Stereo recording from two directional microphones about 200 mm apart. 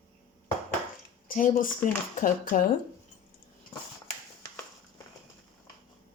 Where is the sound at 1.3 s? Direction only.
45° left (ahead or behind).